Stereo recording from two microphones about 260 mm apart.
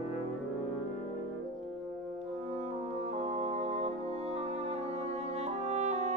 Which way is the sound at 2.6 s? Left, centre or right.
Right.